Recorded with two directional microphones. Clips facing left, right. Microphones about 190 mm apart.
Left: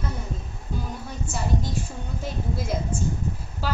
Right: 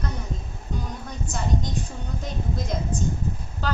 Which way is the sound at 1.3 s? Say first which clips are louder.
Even; 5° left (ahead or behind).